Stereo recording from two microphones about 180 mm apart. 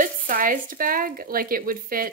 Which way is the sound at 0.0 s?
50° right (ahead or behind).